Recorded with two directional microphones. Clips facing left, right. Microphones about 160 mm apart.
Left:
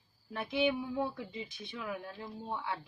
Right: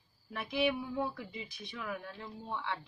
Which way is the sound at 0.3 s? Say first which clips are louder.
Left 1 dB; 30° left (ahead or behind).